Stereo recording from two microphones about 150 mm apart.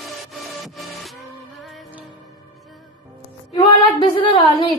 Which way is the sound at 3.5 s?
30° left (ahead or behind).